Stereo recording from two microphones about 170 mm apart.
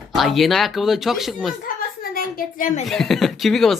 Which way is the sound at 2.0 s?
60° left (ahead or behind).